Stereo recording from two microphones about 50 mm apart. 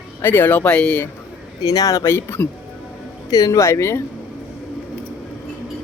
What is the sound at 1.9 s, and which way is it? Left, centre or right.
Speech, left.